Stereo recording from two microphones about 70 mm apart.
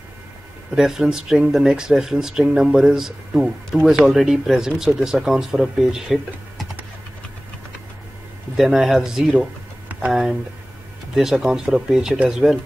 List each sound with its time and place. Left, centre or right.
0.7 s speech: centre
8.5 s speech: centre
11.1 s speech: centre